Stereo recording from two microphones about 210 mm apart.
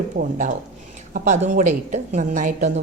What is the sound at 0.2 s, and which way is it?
A woman's voice, 40° right (ahead or behind).